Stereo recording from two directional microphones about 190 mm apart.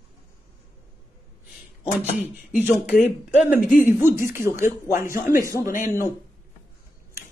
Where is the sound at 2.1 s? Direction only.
10° right (ahead or behind).